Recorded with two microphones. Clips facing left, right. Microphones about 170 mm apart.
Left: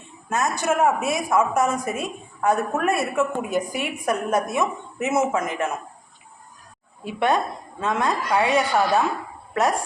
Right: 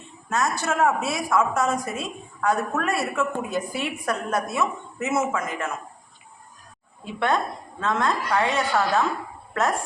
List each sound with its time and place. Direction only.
0.3 s a woman's voice: 20° left (ahead or behind)
7.0 s a woman's voice: 15° left (ahead or behind)